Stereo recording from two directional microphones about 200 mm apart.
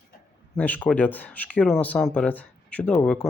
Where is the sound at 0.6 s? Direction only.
5° left (ahead or behind).